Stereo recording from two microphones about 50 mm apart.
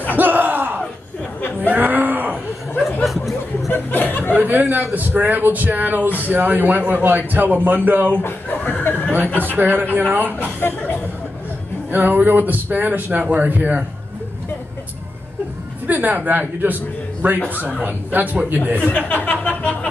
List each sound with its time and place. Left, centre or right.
0.1 s a sound: right
2.8 s chuckle: centre
3.7 s a sound: left
4.4 s a man's voice: right
8.2 s chuckle: left
9.4 s a man's voice: right
11.9 s a man's voice: right
15.9 s a man's voice: right
18.8 s speech: left